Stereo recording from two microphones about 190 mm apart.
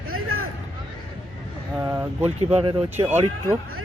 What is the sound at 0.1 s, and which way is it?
Vehicle, 90° right.